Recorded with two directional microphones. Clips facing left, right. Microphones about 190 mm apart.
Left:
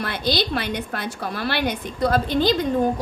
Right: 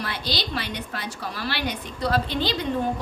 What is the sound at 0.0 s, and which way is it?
A woman's voice, 50° left (ahead or behind).